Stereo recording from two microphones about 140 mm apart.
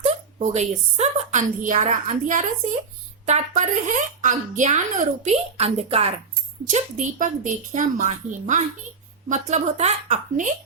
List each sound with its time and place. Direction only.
0.0 s a woman's voice: 55° right (ahead or behind)
6.7 s speech: 60° right (ahead or behind)